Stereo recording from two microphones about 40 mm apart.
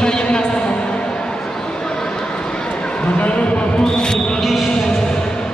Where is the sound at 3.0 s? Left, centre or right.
Left.